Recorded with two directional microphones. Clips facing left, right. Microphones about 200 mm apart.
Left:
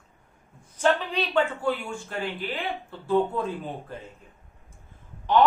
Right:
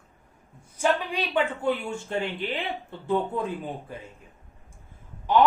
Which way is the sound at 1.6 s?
25° right (ahead or behind).